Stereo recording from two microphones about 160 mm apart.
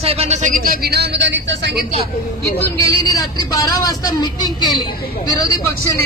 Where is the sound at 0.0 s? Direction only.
40° right (ahead or behind); by 1.9 s 90° right.